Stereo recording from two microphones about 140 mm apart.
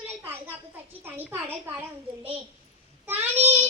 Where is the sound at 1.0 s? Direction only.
15° right (ahead or behind).